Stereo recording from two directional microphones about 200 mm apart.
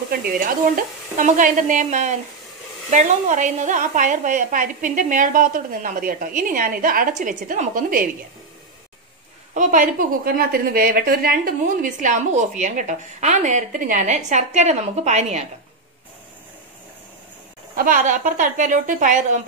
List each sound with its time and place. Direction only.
0.1 s a woman's voice: 45° right (ahead or behind)
9.5 s a woman's voice: 40° right (ahead or behind)
17.7 s a woman's voice: 40° right (ahead or behind)